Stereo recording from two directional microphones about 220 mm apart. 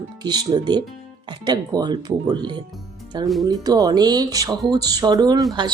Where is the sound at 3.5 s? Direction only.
15° right (ahead or behind).